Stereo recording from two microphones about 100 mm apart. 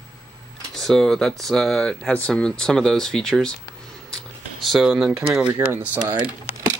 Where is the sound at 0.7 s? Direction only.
5° left (ahead or behind).